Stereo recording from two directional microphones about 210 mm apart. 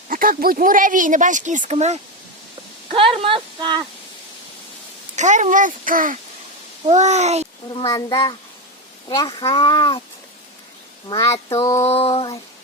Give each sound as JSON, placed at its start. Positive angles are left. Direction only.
{"t": 0.1, "sound": "speech", "side_deg": -45}
{"t": 5.1, "sound": "speech", "side_deg": -35}
{"t": 7.7, "sound": "speech", "side_deg": 20}
{"t": 11.1, "sound": "speech", "side_deg": 20}